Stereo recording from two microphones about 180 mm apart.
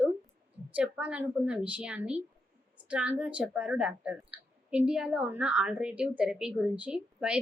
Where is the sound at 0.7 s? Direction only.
5° right (ahead or behind).